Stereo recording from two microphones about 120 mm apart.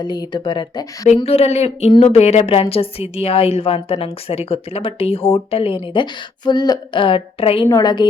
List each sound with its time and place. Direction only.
0.0 s speech: 40° left (ahead or behind)
1.0 s a woman's voice: 60° left (ahead or behind)
5.9 s a woman's voice: 40° left (ahead or behind)
7.7 s speech: 35° left (ahead or behind)